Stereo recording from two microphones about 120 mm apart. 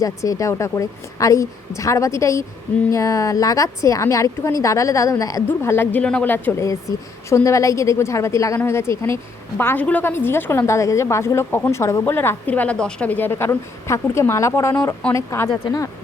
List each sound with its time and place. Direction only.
0.0 s a woman's voice: 25° left (ahead or behind)